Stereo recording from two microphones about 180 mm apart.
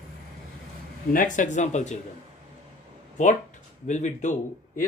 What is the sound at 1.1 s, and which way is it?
Speech, 45° left (ahead or behind).